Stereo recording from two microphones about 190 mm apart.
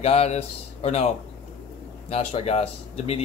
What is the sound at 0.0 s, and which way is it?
Speech, 35° left (ahead or behind).